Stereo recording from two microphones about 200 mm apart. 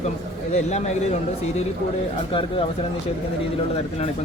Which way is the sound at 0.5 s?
35° left (ahead or behind).